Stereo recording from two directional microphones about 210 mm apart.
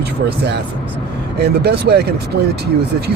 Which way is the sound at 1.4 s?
50° right (ahead or behind).